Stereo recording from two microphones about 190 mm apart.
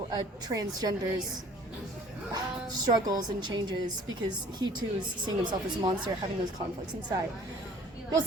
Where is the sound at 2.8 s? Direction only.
20° right (ahead or behind).